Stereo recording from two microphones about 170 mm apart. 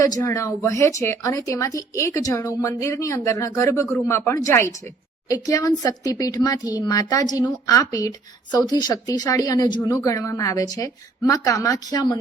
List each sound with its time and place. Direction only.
0.0 s speech: 20° left (ahead or behind)